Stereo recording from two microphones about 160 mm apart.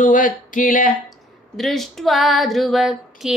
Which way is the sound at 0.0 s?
55° left (ahead or behind).